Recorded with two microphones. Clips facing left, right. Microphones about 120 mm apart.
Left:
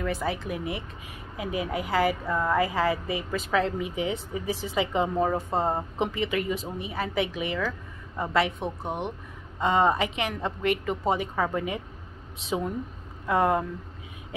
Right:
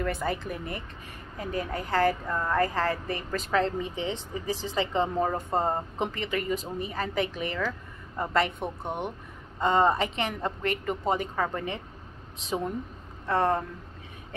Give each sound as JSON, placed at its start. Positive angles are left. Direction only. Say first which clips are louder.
{"t": 0.0, "sound": "a woman's voice", "louder": "even", "side_deg": 0}